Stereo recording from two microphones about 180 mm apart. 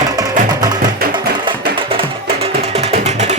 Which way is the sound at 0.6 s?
25° right (ahead or behind).